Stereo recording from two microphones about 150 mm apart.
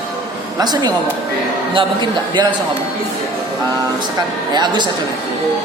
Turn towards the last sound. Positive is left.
turn(degrees=-30)  # may be behind; listen again after turning